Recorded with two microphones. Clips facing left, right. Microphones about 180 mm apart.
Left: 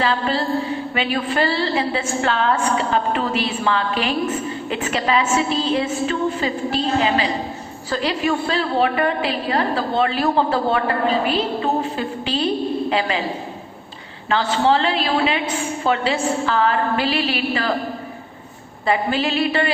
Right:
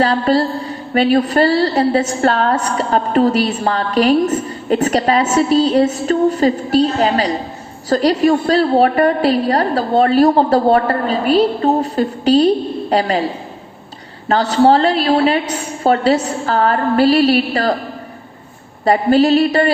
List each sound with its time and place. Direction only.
0.0 s a woman's voice: 40° right (ahead or behind)
14.3 s a woman's voice: 40° right (ahead or behind)
18.9 s a woman's voice: 40° right (ahead or behind)